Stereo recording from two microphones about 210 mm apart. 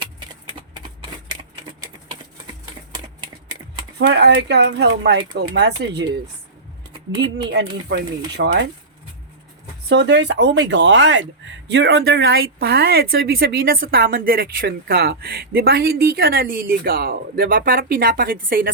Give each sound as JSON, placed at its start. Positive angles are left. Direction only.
{"t": 3.9, "sound": "speech", "side_deg": -55}
{"t": 7.9, "sound": "speech", "side_deg": -50}
{"t": 9.9, "sound": "speech", "side_deg": -55}